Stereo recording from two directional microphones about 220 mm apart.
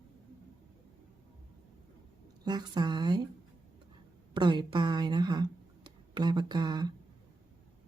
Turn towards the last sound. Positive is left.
turn(degrees=-20)  # may be behind; listen again after turning